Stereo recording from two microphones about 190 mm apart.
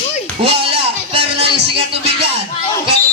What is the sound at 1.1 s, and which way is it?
Music, 30° right (ahead or behind).